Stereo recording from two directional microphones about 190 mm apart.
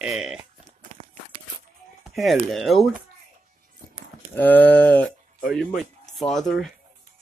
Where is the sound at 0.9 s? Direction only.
40° right (ahead or behind).